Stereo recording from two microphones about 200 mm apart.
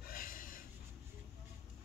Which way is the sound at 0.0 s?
45° left (ahead or behind).